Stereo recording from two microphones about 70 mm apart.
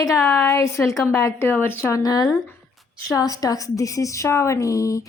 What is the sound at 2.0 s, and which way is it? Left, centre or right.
A woman's voice, left.